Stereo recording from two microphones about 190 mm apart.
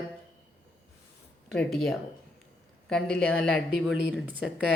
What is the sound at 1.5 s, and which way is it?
A woman's voice, centre (ahead or behind).